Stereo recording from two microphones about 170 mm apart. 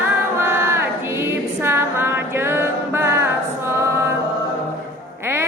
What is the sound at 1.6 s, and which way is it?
Music, 10° right (ahead or behind).